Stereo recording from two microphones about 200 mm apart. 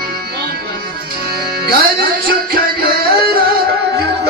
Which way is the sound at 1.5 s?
45° right (ahead or behind).